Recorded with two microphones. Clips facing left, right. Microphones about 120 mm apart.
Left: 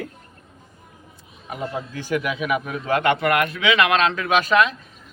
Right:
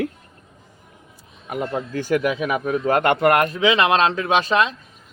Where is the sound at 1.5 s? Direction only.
50° right (ahead or behind); by 4.7 s 30° right (ahead or behind).